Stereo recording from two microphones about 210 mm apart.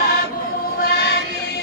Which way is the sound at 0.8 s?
45° left (ahead or behind).